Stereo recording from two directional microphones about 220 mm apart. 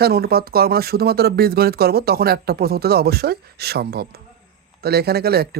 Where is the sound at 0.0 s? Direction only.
45° right (ahead or behind).